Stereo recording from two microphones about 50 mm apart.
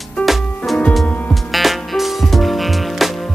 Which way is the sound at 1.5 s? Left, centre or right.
Centre.